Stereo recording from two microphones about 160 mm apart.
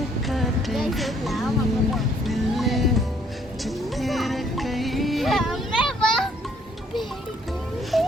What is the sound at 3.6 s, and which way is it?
Music, centre (ahead or behind).